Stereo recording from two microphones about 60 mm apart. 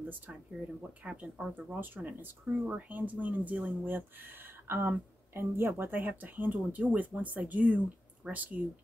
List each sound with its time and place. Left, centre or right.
0.0 s speech: right
4.6 s speech: right